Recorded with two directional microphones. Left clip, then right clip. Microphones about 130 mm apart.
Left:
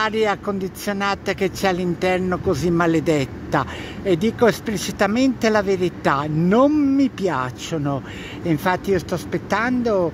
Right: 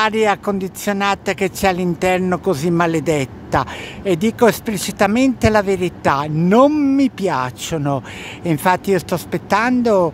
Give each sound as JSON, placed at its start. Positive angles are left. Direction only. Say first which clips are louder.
{"t": 0.0, "sound": "speech", "louder": "right 4 dB", "side_deg": -30}